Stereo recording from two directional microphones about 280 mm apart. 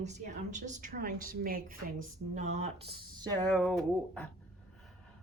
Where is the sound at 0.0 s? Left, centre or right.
Right.